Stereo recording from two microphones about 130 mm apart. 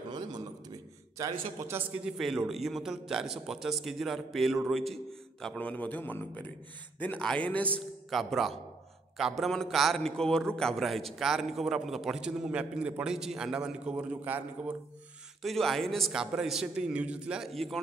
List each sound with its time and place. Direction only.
0.1 s a sound: 30° right (ahead or behind)
1.6 s a man's voice: 15° right (ahead or behind); by 7.8 s 10° left (ahead or behind)
8.1 s a man's voice: centre (ahead or behind)
15.4 s a man's voice: centre (ahead or behind)